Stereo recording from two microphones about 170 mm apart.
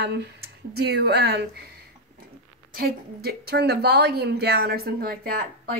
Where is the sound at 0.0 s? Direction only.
75° right (ahead or behind).